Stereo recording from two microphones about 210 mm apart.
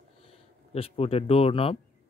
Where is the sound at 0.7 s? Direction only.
30° left (ahead or behind).